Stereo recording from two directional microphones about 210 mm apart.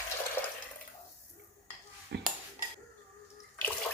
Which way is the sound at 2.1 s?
55° right (ahead or behind).